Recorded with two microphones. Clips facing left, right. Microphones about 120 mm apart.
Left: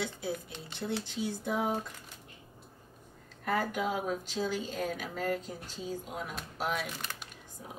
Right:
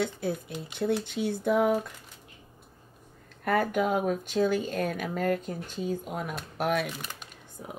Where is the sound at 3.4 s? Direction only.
55° right (ahead or behind).